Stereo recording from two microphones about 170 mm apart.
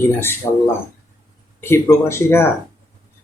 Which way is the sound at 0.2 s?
15° left (ahead or behind).